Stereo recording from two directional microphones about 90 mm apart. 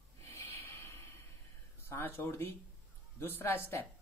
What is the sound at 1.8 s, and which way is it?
Speech, 25° left (ahead or behind).